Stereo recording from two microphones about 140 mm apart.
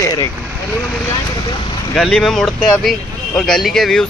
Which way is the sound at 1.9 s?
5° left (ahead or behind).